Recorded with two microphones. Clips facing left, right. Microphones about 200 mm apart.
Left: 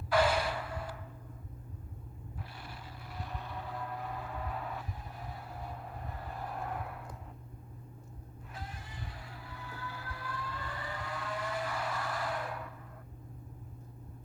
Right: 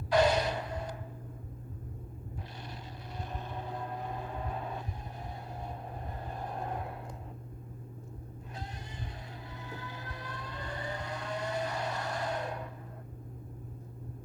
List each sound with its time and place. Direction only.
0.1 s a sound: 20° right (ahead or behind)
3.2 s vehicle: 20° right (ahead or behind)
9.5 s vehicle: 20° right (ahead or behind)